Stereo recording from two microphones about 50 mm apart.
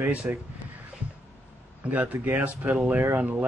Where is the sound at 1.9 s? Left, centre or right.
Right.